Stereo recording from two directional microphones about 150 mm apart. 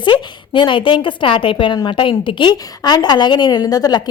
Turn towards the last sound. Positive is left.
turn(degrees=25)  # may be behind; listen again after turning